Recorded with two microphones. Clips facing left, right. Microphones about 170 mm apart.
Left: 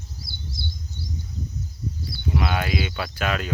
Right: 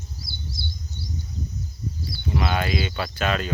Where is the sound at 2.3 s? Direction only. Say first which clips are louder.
Even; 5° left (ahead or behind).